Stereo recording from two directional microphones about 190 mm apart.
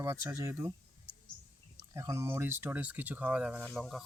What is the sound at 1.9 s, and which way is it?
Speech, 15° right (ahead or behind).